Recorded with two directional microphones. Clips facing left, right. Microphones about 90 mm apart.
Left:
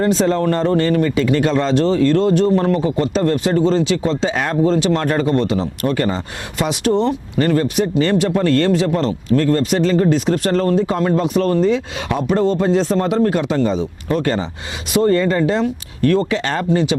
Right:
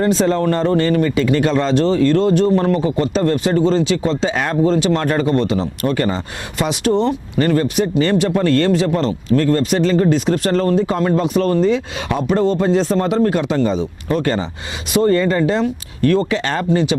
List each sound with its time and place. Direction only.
0.0 s speech: 15° right (ahead or behind)